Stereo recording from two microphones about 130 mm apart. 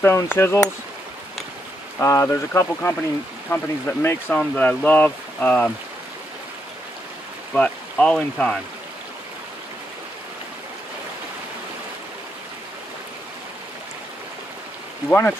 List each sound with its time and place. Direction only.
0.0 s speech: 20° left (ahead or behind)
2.0 s speech: 25° left (ahead or behind)
7.5 s speech: 10° left (ahead or behind)
15.0 s speech: 15° left (ahead or behind)